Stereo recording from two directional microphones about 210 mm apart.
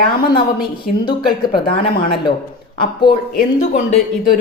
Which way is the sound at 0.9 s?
40° left (ahead or behind).